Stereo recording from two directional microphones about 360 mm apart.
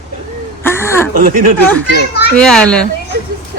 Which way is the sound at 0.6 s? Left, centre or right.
Centre.